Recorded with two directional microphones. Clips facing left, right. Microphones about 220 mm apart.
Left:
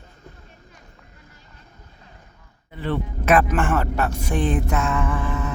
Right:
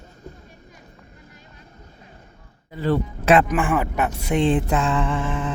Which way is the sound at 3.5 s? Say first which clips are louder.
Right 1 dB; 10° right (ahead or behind).